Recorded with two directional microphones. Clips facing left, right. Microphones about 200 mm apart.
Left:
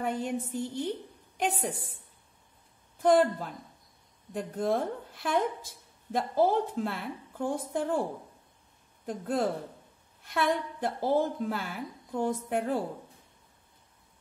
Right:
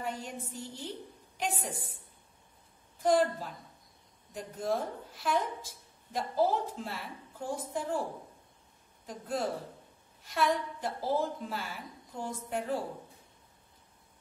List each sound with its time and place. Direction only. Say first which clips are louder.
0.0 s a woman's voice: left 7 dB; 55° left (ahead or behind)
3.0 s a woman's voice: left 4 dB; 55° left (ahead or behind)
9.0 s a woman's voice: left 5 dB; 55° left (ahead or behind)